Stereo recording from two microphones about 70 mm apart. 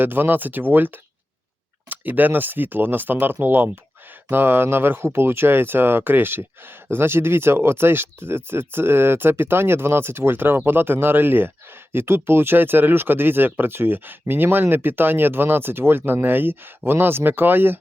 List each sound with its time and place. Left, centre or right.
0.0 s speech: right